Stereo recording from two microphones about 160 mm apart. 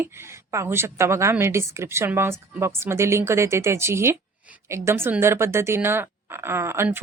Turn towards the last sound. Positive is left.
turn(degrees=-15)  # may be behind; listen again after turning